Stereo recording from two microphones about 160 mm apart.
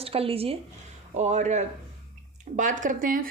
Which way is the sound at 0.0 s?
35° right (ahead or behind).